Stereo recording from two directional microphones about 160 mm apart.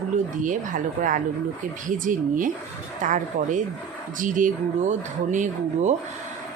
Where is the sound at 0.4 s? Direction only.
55° right (ahead or behind).